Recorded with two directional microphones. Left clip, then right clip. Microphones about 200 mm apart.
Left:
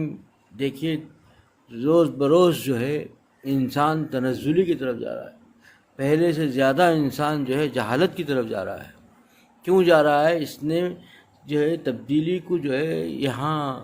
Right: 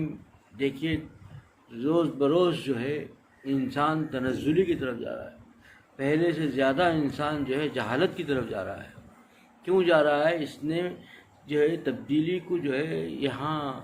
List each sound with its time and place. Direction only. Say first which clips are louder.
0.5 s a man's voice: left 3 dB; 50° left (ahead or behind)